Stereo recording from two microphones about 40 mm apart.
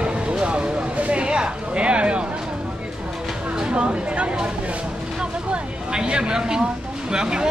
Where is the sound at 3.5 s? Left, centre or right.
Right.